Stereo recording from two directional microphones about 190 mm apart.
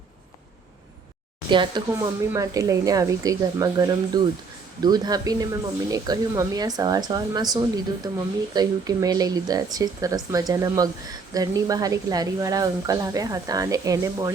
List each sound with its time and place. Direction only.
1.5 s speech: 25° right (ahead or behind)